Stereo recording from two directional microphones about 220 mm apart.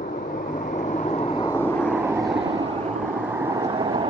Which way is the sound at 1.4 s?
10° left (ahead or behind).